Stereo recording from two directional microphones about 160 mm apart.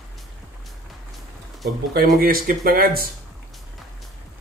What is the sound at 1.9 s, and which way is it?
Speech, 65° right (ahead or behind).